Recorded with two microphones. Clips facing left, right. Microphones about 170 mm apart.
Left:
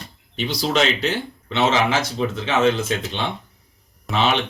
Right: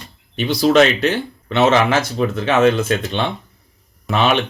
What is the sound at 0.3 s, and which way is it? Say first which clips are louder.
Speech: right 8 dB; 60° right (ahead or behind).